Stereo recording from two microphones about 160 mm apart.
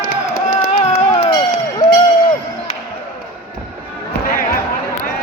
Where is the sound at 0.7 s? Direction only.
40° left (ahead or behind).